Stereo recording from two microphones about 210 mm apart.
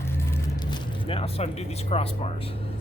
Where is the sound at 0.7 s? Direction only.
25° left (ahead or behind).